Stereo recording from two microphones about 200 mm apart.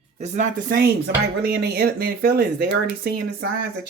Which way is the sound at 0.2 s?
40° right (ahead or behind).